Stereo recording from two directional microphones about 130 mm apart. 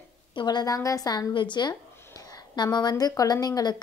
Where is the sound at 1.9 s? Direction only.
20° left (ahead or behind).